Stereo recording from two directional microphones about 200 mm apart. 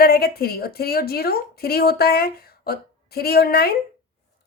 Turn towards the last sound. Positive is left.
turn(degrees=50)  # may be behind; listen again after turning